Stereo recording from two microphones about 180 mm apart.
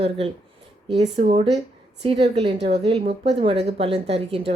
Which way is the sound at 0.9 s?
35° right (ahead or behind).